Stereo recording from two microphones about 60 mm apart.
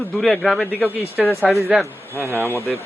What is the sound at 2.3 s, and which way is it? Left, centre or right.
Speech, left.